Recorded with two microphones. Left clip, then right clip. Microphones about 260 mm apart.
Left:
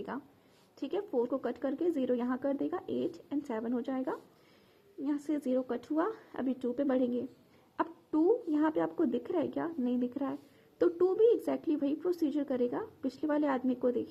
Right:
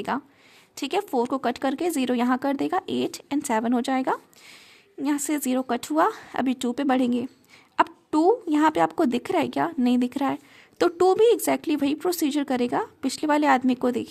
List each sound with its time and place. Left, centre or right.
0.1 s speech: right
7.8 s a woman's voice: right